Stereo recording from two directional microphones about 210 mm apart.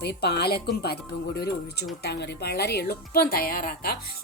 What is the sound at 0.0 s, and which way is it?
A woman's voice, 50° left (ahead or behind).